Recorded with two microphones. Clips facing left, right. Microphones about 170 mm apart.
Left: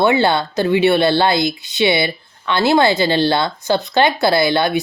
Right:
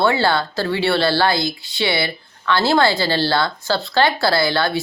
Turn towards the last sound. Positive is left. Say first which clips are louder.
# left 3 dB
turn(degrees=20)  # may be behind; listen again after turning